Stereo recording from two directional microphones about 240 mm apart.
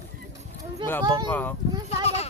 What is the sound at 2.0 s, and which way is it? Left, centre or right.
Speech, left.